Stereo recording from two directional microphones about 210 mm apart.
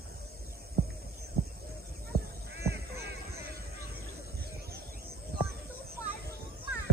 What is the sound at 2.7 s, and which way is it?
Music, 50° right (ahead or behind).